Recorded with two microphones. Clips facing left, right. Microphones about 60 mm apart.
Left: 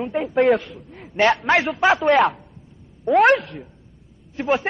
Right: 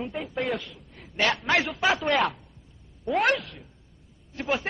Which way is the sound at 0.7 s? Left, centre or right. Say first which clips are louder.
Left 9 dB; left.